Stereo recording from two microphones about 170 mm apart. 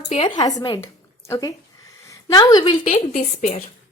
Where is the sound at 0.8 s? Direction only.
15° left (ahead or behind).